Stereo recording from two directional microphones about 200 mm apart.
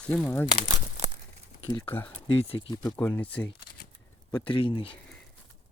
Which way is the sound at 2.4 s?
25° left (ahead or behind).